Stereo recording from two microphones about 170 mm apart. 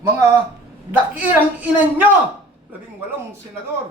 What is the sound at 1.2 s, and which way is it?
Speech, 10° right (ahead or behind).